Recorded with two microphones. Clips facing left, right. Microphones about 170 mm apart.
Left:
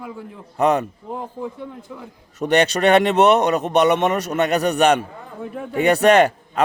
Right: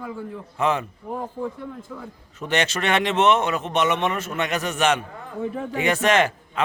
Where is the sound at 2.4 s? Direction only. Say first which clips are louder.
Left 7 dB; 40° left (ahead or behind).